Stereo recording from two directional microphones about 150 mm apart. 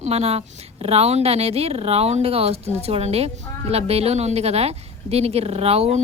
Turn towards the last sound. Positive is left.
turn(degrees=-45)  # may be behind; listen again after turning